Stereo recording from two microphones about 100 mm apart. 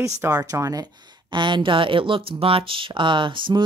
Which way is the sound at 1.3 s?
55° right (ahead or behind).